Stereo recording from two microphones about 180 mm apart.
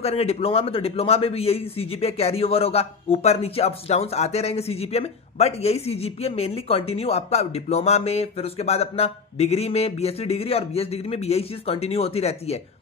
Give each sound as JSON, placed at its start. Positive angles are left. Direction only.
{"t": 0.0, "sound": "a man's voice", "side_deg": 35}